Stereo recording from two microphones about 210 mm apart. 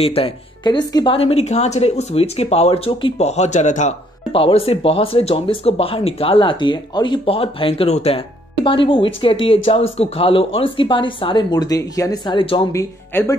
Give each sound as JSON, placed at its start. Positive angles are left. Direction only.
{"t": 0.0, "sound": "speech", "side_deg": 25}
{"t": 13.1, "sound": "speech", "side_deg": 10}